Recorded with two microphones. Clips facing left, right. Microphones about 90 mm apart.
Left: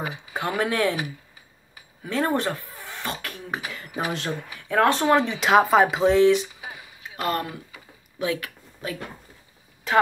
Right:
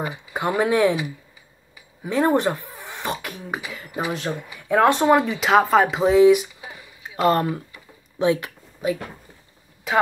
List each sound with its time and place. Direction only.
0.3 s speech: 15° right (ahead or behind)
2.0 s speech: 15° right (ahead or behind)
4.6 s speech: 15° right (ahead or behind)
5.2 s speech: centre (ahead or behind)
7.2 s speech: 25° right (ahead or behind)